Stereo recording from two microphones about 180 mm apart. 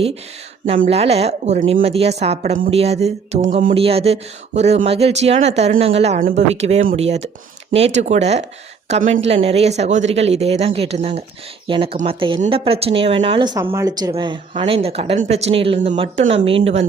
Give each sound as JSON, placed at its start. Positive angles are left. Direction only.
{"t": 0.9, "sound": "speech", "side_deg": -35}
{"t": 3.8, "sound": "speech", "side_deg": -35}
{"t": 6.1, "sound": "speech", "side_deg": -50}
{"t": 6.5, "sound": "speech", "side_deg": -35}